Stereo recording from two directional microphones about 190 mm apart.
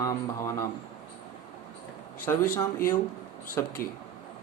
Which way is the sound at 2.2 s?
15° left (ahead or behind).